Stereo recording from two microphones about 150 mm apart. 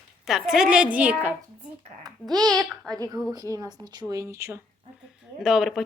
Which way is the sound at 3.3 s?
25° right (ahead or behind).